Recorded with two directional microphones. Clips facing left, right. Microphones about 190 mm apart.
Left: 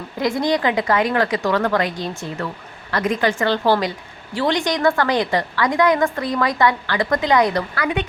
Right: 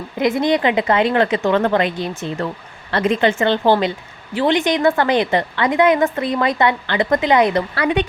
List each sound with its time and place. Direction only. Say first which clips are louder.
0.2 s a woman's voice: right 3 dB; 20° right (ahead or behind)
2.9 s a woman's voice: right 3 dB; 25° right (ahead or behind)